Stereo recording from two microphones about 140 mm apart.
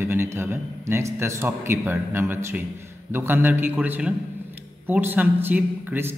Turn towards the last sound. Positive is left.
turn(degrees=-15)  # may be behind; listen again after turning